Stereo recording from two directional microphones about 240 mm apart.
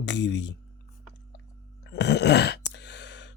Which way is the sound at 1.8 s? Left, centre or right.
Left.